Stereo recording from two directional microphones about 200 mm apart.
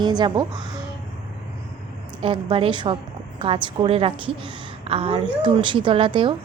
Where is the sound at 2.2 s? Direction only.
25° right (ahead or behind).